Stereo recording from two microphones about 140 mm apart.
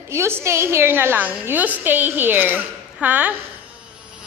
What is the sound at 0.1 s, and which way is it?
A woman's voice, 20° right (ahead or behind).